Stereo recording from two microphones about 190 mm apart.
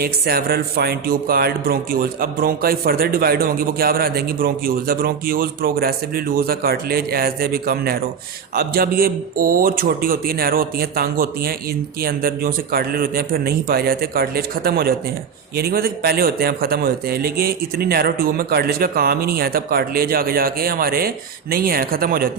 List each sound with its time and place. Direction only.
0.0 s speech: 55° right (ahead or behind)